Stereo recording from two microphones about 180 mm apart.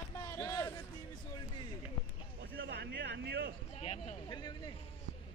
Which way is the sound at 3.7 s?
35° left (ahead or behind).